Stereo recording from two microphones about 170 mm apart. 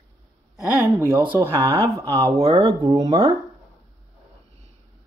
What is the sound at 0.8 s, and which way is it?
Speech, 10° right (ahead or behind).